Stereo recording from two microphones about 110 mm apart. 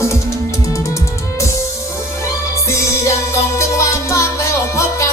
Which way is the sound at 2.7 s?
25° left (ahead or behind).